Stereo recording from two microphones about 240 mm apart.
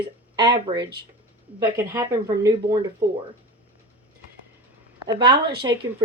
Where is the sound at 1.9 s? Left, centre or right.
Centre.